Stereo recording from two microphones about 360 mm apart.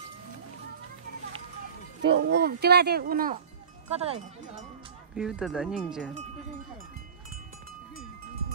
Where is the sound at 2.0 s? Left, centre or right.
Right.